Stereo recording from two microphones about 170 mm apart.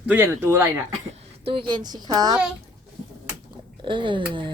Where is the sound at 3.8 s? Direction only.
30° right (ahead or behind).